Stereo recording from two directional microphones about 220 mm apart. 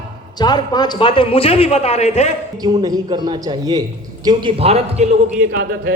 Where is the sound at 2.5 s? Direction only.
15° right (ahead or behind).